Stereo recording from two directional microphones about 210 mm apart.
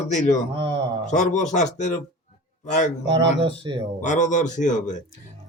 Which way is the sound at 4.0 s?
35° left (ahead or behind).